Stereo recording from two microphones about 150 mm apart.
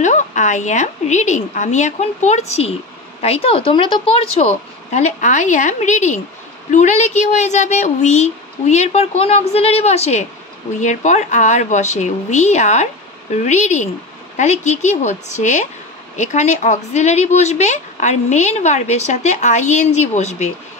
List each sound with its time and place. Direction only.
0.0 s speech: 55° left (ahead or behind)